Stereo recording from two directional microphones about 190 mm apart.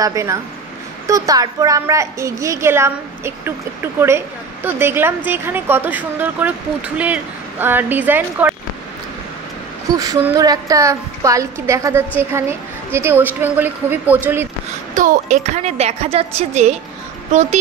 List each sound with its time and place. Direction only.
0.0 s a woman's voice: 15° right (ahead or behind)
9.9 s a woman's voice: 20° right (ahead or behind)
15.0 s a woman's voice: 40° right (ahead or behind)